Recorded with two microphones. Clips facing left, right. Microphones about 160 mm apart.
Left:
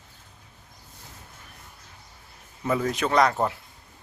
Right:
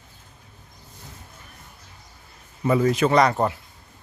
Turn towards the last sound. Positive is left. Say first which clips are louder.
# right 3 dB
turn(degrees=0)  # may be behind; listen again after turning